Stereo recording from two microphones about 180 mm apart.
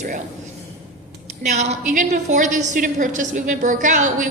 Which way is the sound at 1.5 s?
40° right (ahead or behind).